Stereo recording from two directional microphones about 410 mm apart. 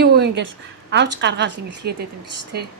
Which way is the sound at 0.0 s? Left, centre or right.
Right.